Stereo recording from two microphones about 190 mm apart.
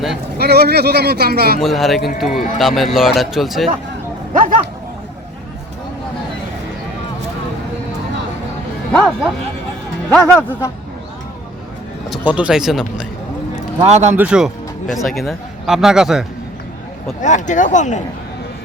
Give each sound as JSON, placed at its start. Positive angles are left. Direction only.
{"t": 0.3, "sound": "speech", "side_deg": -55}
{"t": 1.6, "sound": "speech", "side_deg": 0}
{"t": 4.4, "sound": "bow-wow", "side_deg": -45}
{"t": 8.9, "sound": "speech", "side_deg": 5}
{"t": 12.1, "sound": "speech", "side_deg": -5}
{"t": 13.8, "sound": "a man's voice", "side_deg": -35}
{"t": 14.1, "sound": "speech", "side_deg": -5}
{"t": 17.2, "sound": "speech", "side_deg": 40}